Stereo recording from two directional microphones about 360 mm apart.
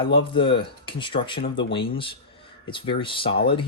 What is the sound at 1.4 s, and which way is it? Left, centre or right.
Speech, left.